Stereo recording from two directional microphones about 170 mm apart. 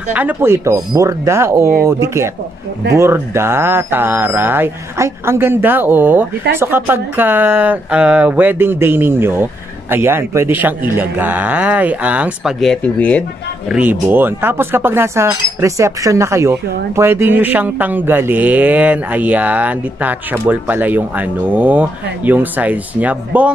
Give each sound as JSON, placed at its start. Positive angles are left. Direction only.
{"t": 0.1, "sound": "speech", "side_deg": -10}
{"t": 13.7, "sound": "speech", "side_deg": -10}